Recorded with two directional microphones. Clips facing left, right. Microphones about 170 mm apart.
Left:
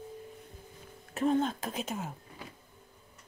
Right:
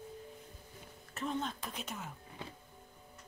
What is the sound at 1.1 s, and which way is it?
Speech, 50° left (ahead or behind).